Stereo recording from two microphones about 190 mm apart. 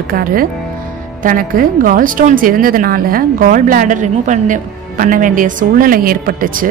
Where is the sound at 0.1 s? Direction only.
50° right (ahead or behind).